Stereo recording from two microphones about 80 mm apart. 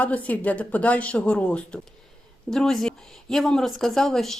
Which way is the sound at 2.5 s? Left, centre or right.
Centre.